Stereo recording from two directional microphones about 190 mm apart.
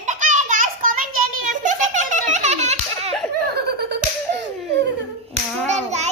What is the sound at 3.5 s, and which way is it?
Slap, 60° right (ahead or behind).